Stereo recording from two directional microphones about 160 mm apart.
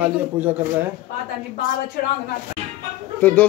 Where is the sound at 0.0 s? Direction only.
10° right (ahead or behind).